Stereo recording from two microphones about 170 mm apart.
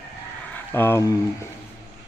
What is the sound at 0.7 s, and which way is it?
Speech, 10° left (ahead or behind).